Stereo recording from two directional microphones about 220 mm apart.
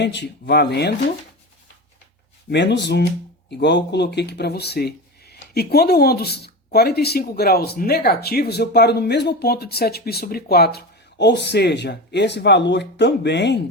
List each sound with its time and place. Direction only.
0.0 s speech: 50° left (ahead or behind)
2.5 s speech: 50° left (ahead or behind)